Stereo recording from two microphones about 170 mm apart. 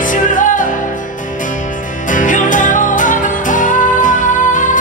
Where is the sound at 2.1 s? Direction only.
50° left (ahead or behind).